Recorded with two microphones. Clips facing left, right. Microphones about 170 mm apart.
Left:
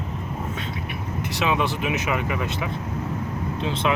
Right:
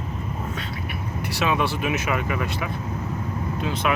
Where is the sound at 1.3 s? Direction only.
20° left (ahead or behind).